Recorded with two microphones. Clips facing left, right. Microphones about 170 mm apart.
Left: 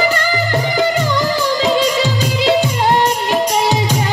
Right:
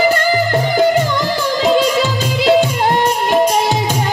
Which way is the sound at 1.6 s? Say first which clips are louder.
Right 4 dB; 50° right (ahead or behind).